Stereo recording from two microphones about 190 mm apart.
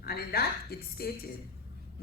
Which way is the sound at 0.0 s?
55° left (ahead or behind).